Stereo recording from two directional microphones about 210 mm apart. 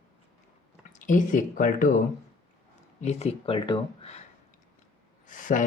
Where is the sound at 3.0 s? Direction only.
30° left (ahead or behind).